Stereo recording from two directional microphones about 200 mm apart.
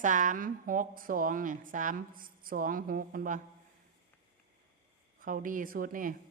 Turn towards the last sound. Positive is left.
turn(degrees=-45)  # may be behind; listen again after turning